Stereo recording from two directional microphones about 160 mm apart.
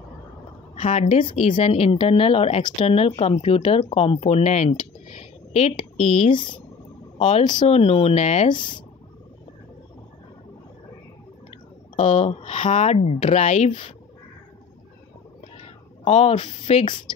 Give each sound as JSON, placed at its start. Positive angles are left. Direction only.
{"t": 0.7, "sound": "a woman's voice", "side_deg": 45}
{"t": 1.2, "sound": "speech", "side_deg": 35}
{"t": 7.4, "sound": "speech", "side_deg": 25}
{"t": 7.7, "sound": "speech", "side_deg": 40}
{"t": 8.5, "sound": "speech", "side_deg": 30}
{"t": 12.0, "sound": "speech", "side_deg": 40}
{"t": 16.0, "sound": "speech", "side_deg": 45}